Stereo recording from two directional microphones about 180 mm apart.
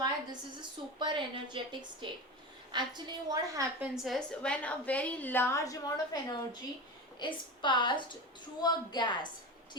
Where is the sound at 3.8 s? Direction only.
Centre (ahead or behind).